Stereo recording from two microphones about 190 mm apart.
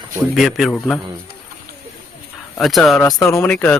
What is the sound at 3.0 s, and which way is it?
Speech, 15° left (ahead or behind).